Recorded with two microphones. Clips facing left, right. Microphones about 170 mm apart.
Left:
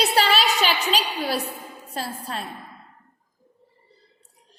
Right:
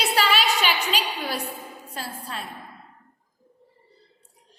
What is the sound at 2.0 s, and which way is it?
Speech, 35° left (ahead or behind).